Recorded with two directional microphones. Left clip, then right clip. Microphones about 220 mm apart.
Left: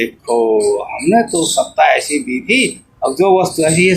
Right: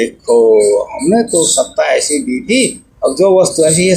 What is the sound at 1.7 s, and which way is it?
Speech, 35° left (ahead or behind).